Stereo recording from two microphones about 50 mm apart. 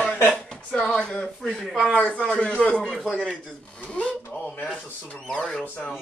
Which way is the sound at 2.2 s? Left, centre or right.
Centre.